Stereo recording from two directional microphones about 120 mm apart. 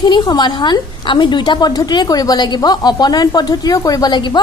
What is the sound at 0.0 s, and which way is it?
A woman's voice, 35° left (ahead or behind).